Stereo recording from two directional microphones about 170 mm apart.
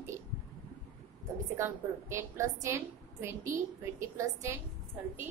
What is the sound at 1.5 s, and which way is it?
A woman's voice, 15° right (ahead or behind).